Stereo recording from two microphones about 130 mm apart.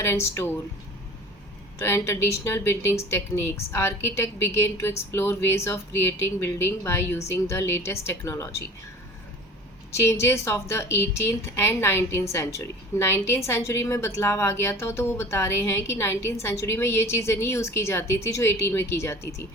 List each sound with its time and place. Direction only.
0.0 s a woman's voice: 20° left (ahead or behind)
1.8 s a woman's voice: 20° left (ahead or behind)
10.0 s a woman's voice: 20° left (ahead or behind)